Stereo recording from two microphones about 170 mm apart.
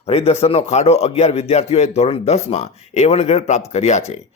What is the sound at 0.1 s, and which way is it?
Speech, 35° left (ahead or behind).